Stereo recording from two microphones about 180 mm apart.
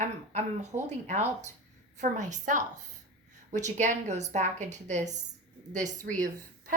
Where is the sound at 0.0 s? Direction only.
45° right (ahead or behind).